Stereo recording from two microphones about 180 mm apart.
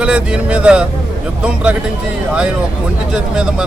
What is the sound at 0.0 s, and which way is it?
Speech, 5° right (ahead or behind).